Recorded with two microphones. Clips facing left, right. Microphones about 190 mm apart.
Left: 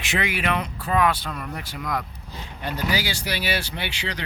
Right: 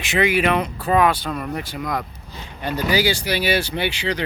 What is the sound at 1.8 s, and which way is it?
Speech, 10° right (ahead or behind).